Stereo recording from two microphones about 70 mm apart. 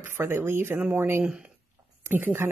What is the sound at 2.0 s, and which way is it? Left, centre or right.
Speech, right.